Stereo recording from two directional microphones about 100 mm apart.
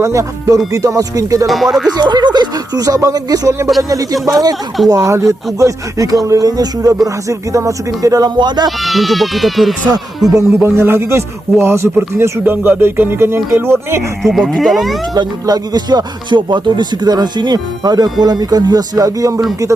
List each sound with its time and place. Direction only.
0.0 s speech: 30° right (ahead or behind)
1.5 s speech: centre (ahead or behind)
2.0 s speech: 45° right (ahead or behind)
8.4 s speech: 45° right (ahead or behind)
8.8 s speech: centre (ahead or behind)
10.3 s a man's voice: 25° right (ahead or behind)
14.2 s speech: centre (ahead or behind)
15.1 s speech: 40° right (ahead or behind)